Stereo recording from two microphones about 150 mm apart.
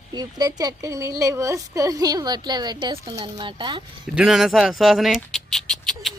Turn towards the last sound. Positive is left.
turn(degrees=5)  # may be behind; listen again after turning